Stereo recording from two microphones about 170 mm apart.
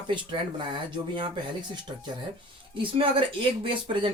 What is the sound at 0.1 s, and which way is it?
Speech, 30° right (ahead or behind).